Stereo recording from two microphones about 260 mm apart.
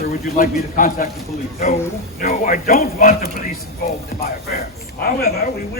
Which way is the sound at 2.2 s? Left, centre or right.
Left.